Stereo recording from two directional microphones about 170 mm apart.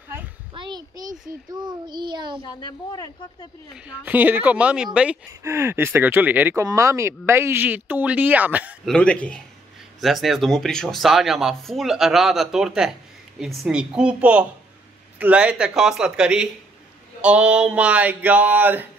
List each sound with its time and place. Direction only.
0.6 s a sound: 25° right (ahead or behind)
1.5 s child singing: 25° right (ahead or behind)
2.4 s speech: 25° left (ahead or behind)
3.7 s speech: 10° right (ahead or behind)
8.8 s a man's voice: 5° left (ahead or behind); by 18.9 s 10° right (ahead or behind)